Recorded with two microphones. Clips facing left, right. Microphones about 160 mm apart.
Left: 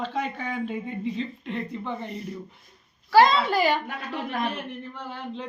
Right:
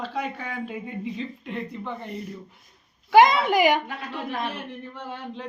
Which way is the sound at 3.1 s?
15° right (ahead or behind).